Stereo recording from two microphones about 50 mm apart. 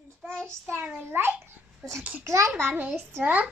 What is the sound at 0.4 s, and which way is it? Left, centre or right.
A child's voice, right.